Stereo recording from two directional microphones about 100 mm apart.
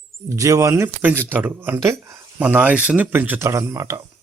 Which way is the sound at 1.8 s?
30° right (ahead or behind).